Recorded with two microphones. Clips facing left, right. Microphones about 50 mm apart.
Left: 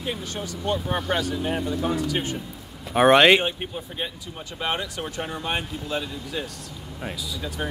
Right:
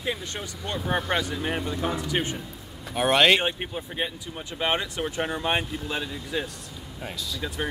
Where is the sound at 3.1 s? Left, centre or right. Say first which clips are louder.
Left 4 dB; centre.